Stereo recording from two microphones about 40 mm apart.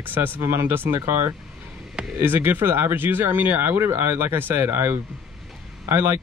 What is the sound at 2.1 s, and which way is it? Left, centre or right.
Speech, right.